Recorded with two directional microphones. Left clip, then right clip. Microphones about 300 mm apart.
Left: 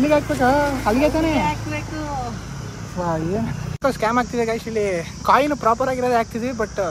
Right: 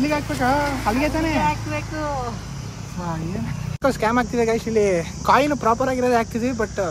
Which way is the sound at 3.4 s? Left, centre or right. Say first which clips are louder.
Even; centre.